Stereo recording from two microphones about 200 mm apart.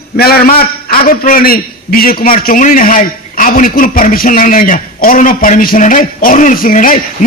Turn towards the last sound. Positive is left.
turn(degrees=40)  # may be behind; listen again after turning